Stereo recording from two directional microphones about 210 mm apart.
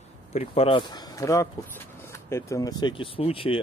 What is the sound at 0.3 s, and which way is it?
Speech, 30° left (ahead or behind).